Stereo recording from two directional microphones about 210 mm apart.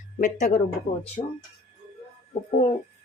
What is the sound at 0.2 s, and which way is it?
Speech, 35° left (ahead or behind).